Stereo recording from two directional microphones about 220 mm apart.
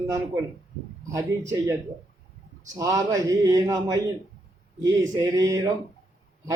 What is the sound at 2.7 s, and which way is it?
Speech, 15° right (ahead or behind).